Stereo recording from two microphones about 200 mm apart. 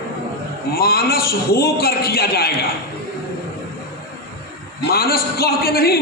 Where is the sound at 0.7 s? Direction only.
50° left (ahead or behind).